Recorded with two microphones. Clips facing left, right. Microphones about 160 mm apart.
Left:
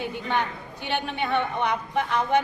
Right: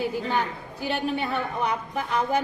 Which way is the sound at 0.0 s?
35° right (ahead or behind).